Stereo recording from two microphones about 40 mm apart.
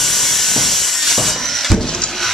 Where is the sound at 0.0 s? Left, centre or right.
Centre.